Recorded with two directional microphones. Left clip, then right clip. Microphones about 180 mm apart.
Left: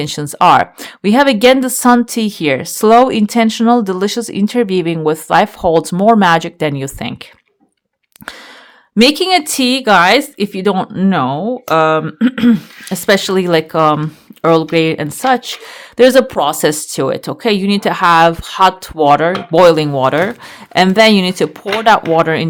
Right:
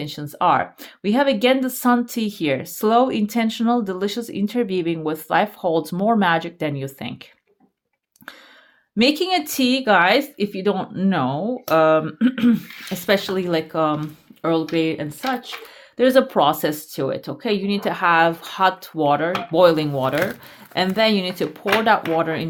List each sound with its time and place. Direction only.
0.0 s speech: 45° left (ahead or behind)
9.0 s speech: 35° left (ahead or behind); by 15.7 s 60° left (ahead or behind)
16.0 s speech: 40° left (ahead or behind)